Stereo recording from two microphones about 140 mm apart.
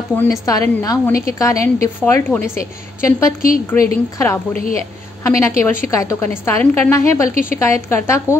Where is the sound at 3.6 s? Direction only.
20° left (ahead or behind).